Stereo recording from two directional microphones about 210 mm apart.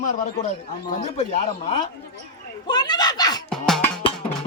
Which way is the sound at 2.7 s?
20° left (ahead or behind).